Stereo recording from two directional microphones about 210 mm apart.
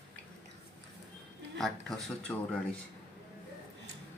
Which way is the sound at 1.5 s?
Centre (ahead or behind).